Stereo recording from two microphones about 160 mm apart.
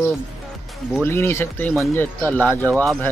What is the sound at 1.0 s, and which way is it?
Speech, 15° left (ahead or behind).